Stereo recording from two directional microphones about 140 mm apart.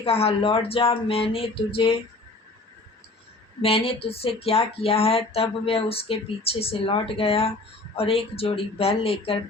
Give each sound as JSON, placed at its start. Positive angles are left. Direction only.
{"t": 0.0, "sound": "speech", "side_deg": 45}
{"t": 3.6, "sound": "speech", "side_deg": 45}